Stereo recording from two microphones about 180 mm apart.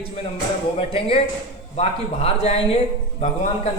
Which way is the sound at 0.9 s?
30° left (ahead or behind).